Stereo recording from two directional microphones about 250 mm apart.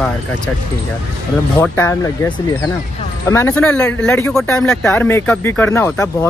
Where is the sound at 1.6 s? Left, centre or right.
Centre.